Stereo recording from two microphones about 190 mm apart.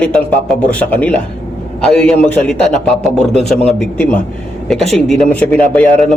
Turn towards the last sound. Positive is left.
turn(degrees=5)  # may be behind; listen again after turning